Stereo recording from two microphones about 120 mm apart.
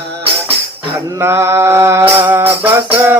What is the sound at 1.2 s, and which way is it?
Music, 20° right (ahead or behind).